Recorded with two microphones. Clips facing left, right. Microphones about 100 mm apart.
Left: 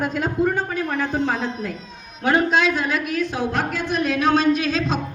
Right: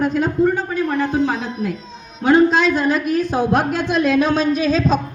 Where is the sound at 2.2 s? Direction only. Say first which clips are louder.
Right 5 dB; 25° right (ahead or behind); by 3.6 s 45° right (ahead or behind).